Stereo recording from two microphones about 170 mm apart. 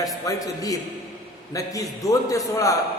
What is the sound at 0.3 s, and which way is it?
A man's voice, 20° left (ahead or behind).